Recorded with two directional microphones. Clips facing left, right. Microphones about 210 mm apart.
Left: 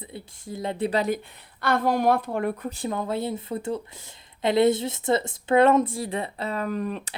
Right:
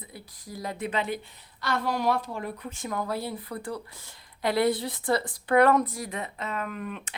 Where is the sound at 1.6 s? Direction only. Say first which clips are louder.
Left 6 dB; 50° left (ahead or behind).